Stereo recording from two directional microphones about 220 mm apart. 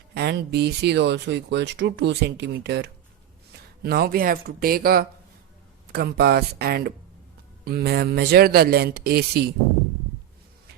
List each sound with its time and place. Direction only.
0.1 s speech: 50° right (ahead or behind)